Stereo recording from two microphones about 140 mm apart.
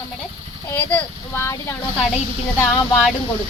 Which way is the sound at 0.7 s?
10° left (ahead or behind).